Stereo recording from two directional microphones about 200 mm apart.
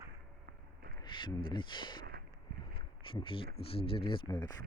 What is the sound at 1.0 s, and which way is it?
Speech, 25° left (ahead or behind).